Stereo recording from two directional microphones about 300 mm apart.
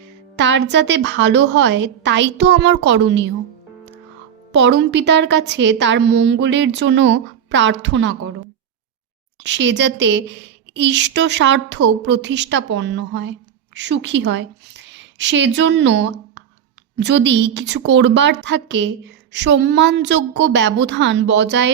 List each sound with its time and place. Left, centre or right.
0.3 s a woman's voice: right
4.5 s a woman's voice: right
9.4 s a woman's voice: right